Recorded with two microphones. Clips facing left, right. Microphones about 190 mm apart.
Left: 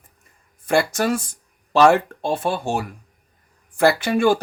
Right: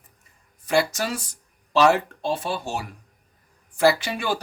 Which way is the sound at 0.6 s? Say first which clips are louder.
Left 3 dB; 50° left (ahead or behind).